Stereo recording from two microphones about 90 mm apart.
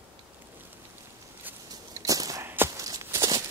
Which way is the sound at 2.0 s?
40° right (ahead or behind).